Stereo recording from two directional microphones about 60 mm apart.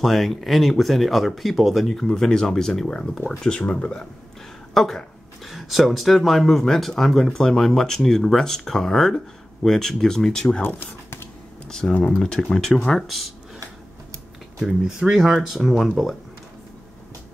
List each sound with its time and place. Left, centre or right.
0.0 s speech: centre
4.7 s speech: centre
10.6 s speech: left
11.6 s a sound: centre
12.1 s speech: centre
14.6 s speech: centre